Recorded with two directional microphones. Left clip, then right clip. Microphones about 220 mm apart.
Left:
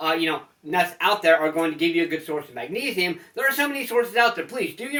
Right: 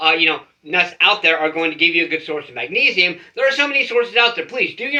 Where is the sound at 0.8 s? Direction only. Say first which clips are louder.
Right 6 dB; 20° left (ahead or behind).